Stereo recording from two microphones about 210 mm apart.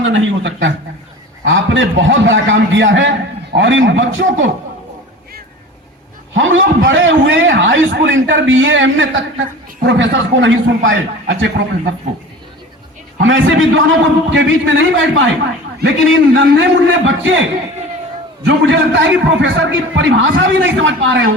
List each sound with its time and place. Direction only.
0.0 s a man's voice: 65° right (ahead or behind)
6.3 s a man's voice: 65° right (ahead or behind)
13.2 s a man's voice: 65° right (ahead or behind)
18.4 s a man's voice: 60° right (ahead or behind)